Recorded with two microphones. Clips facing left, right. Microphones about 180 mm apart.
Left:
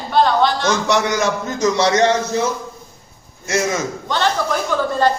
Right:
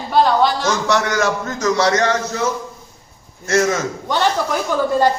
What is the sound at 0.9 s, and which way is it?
A man's voice, 20° left (ahead or behind).